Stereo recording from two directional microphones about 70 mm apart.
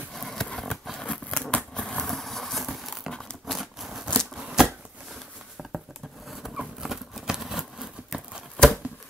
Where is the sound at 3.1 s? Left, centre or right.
Centre.